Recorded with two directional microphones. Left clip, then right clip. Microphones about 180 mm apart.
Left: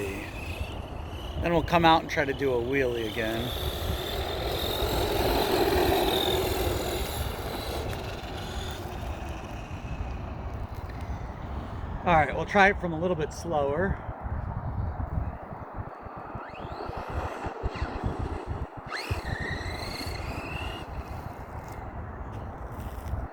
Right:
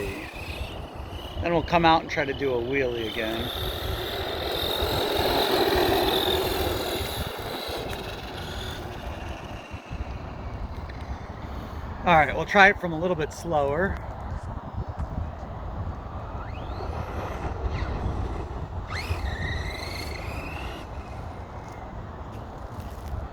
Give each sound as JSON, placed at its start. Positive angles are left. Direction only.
{"t": 1.4, "sound": "speech", "side_deg": 25}
{"t": 2.5, "sound": "speech", "side_deg": 10}
{"t": 2.9, "sound": "vehicle", "side_deg": 15}
{"t": 12.0, "sound": "speech", "side_deg": -20}
{"t": 16.8, "sound": "vehicle", "side_deg": 0}